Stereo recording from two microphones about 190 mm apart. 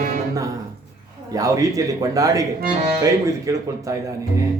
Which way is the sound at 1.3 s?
20° right (ahead or behind).